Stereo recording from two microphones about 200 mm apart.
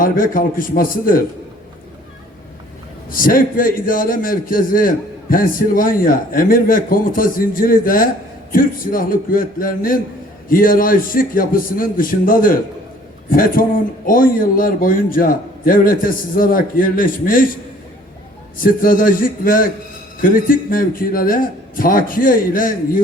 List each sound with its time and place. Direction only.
0.0 s a man's voice: 45° left (ahead or behind)
3.1 s a man's voice: 45° left (ahead or behind)